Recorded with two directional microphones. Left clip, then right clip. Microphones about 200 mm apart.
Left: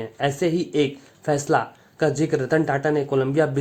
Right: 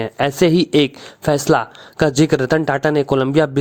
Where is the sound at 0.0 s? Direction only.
40° right (ahead or behind).